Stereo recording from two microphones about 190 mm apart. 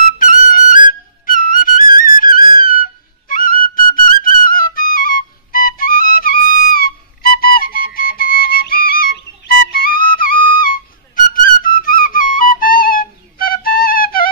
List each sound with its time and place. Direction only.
0.0 s music: 45° left (ahead or behind)
11.3 s flute: 45° left (ahead or behind)